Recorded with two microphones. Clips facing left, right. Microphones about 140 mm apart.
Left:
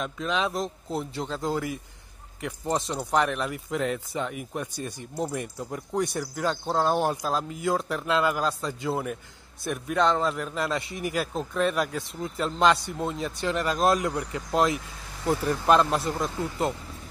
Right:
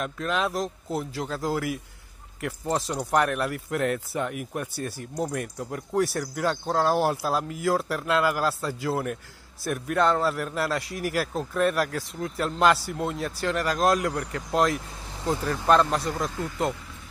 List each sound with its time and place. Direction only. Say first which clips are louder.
0.0 s a man's voice: right 1 dB; 5° right (ahead or behind)